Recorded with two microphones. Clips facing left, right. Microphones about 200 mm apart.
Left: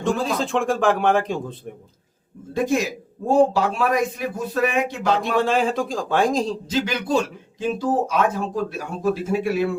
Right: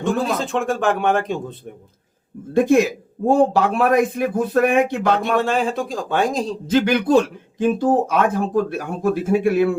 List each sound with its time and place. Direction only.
0.0 s a man's voice: centre (ahead or behind)
2.5 s a man's voice: 55° right (ahead or behind)
5.1 s speech: centre (ahead or behind)
6.7 s a man's voice: 55° right (ahead or behind)